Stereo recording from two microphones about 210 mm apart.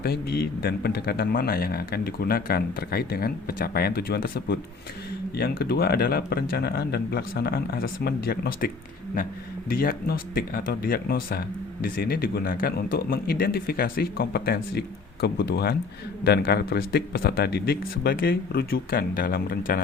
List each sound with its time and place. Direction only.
0.0 s speech: 50° left (ahead or behind)